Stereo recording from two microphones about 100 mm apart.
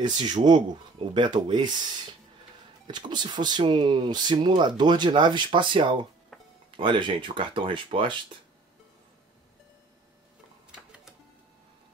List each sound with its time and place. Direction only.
0.2 s speech: 45° right (ahead or behind)
0.9 s speech: 55° right (ahead or behind)
2.9 s speech: 50° right (ahead or behind)
6.3 s music: centre (ahead or behind)
6.8 s speech: 55° right (ahead or behind)